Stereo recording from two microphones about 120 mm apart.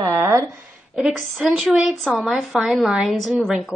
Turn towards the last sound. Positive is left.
turn(degrees=0)  # may be behind; listen again after turning